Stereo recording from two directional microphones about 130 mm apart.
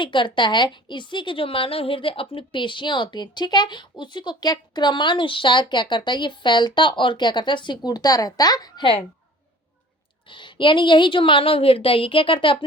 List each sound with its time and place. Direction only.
0.0 s a woman's voice: 40° left (ahead or behind)
10.2 s a woman's voice: 40° left (ahead or behind)